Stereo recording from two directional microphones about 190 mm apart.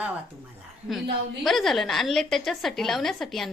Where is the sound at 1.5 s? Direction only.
Centre (ahead or behind).